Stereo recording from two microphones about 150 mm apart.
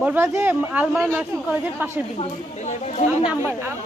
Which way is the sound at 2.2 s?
50° left (ahead or behind).